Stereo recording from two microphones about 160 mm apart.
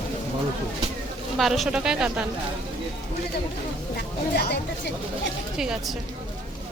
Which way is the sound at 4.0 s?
85° left.